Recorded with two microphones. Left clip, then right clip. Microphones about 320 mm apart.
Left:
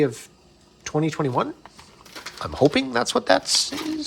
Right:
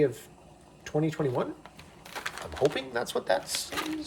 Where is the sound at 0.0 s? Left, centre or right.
Left.